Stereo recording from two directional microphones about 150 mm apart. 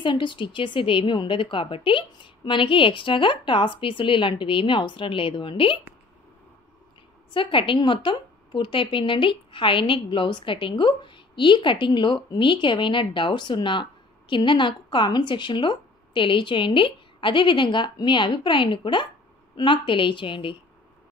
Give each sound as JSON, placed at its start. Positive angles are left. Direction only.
{"t": 0.0, "sound": "a woman's voice", "side_deg": 30}
{"t": 7.3, "sound": "a woman's voice", "side_deg": 35}